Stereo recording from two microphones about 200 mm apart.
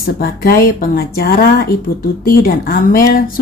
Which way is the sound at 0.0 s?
50° left (ahead or behind).